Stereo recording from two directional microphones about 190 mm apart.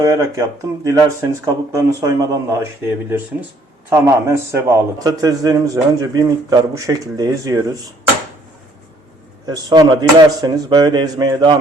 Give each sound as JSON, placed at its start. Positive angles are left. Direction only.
{"t": 0.0, "sound": "a man's voice", "side_deg": -15}
{"t": 9.5, "sound": "a man's voice", "side_deg": -20}